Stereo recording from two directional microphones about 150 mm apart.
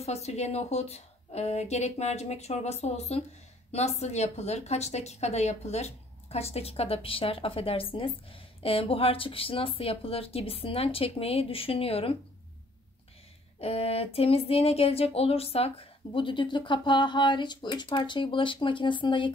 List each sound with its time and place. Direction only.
0.0 s a woman's voice: 45° left (ahead or behind)
13.6 s a woman's voice: 40° left (ahead or behind)